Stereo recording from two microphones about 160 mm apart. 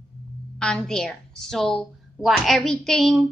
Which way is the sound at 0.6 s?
5° left (ahead or behind).